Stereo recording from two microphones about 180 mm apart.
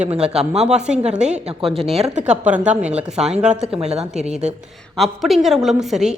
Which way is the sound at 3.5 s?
35° right (ahead or behind).